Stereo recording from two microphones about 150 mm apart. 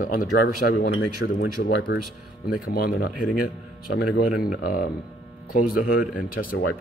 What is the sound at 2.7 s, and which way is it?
Speech, 75° left (ahead or behind).